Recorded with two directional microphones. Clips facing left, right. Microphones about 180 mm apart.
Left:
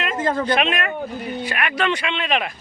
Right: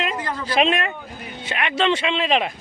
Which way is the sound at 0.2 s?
50° left (ahead or behind).